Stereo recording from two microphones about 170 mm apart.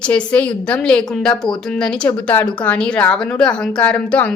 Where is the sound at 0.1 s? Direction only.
10° left (ahead or behind).